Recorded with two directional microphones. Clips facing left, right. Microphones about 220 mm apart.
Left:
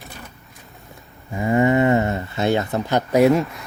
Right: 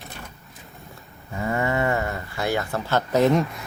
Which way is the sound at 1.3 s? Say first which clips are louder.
Left 7 dB; 15° left (ahead or behind).